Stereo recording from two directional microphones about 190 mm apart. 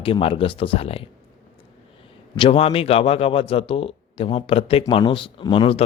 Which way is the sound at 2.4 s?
30° left (ahead or behind).